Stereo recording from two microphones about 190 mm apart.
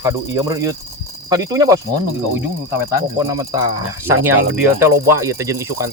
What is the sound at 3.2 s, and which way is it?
Speech, 20° right (ahead or behind).